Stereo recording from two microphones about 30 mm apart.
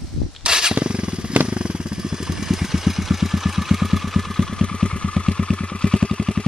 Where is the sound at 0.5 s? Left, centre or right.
Right.